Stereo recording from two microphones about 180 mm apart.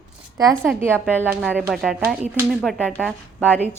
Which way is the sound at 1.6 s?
5° right (ahead or behind).